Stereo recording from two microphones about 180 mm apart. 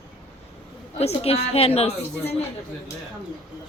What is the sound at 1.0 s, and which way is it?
Speech, 35° left (ahead or behind).